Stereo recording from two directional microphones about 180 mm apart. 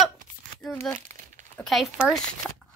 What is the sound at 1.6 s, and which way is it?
Speech, centre (ahead or behind).